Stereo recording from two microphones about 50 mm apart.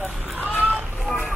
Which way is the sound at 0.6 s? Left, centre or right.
Right.